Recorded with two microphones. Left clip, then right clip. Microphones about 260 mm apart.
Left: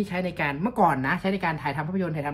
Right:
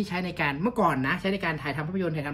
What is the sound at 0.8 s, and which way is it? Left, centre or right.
Speech, centre.